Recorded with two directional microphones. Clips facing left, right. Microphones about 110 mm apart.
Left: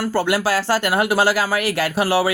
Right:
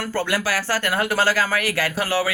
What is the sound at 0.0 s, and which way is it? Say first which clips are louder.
Speech: left 4 dB; 15° left (ahead or behind).